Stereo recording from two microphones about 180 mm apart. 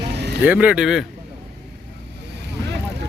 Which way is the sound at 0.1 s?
70° right (ahead or behind).